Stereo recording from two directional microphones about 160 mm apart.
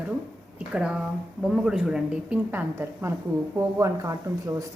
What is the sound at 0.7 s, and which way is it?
A woman's voice, 5° right (ahead or behind).